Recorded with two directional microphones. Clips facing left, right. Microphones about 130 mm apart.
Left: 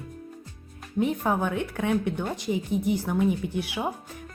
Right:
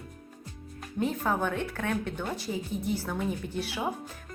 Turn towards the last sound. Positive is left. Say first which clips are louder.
# left 3 dB
turn(degrees=15)  # may be behind; listen again after turning